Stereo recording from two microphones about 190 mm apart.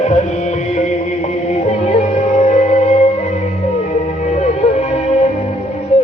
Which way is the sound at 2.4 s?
35° left (ahead or behind).